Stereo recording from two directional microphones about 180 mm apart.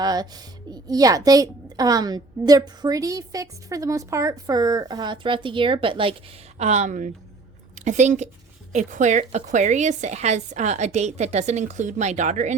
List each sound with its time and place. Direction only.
0.0 s a woman's voice: 20° right (ahead or behind)
6.6 s speech: 40° right (ahead or behind)